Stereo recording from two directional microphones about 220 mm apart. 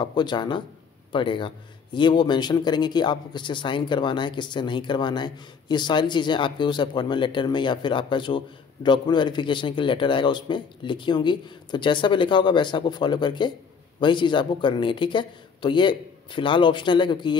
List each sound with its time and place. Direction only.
0.0 s speech: 20° left (ahead or behind)